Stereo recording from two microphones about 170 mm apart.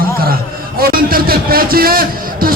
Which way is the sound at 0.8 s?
60° right (ahead or behind).